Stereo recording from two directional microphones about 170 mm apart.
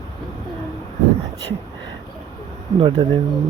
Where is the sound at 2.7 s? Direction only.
30° right (ahead or behind).